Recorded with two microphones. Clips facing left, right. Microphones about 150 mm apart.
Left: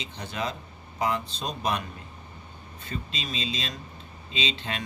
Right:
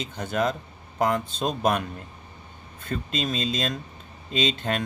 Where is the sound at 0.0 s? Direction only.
50° right (ahead or behind).